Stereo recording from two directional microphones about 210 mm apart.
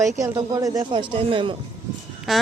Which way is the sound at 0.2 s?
15° right (ahead or behind).